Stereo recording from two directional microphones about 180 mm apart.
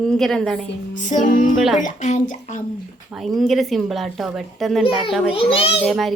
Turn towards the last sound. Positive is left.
turn(degrees=0)  # may be behind; listen again after turning